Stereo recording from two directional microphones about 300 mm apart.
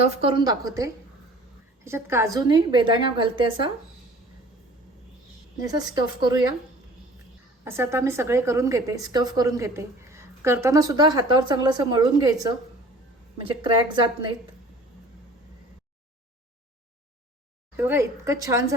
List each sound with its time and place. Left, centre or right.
0.1 s a woman's voice: centre
5.6 s a woman's voice: centre
7.6 s a woman's voice: centre
17.7 s a woman's voice: centre